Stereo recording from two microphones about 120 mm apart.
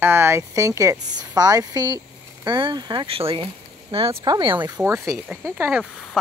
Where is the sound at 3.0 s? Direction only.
50° right (ahead or behind).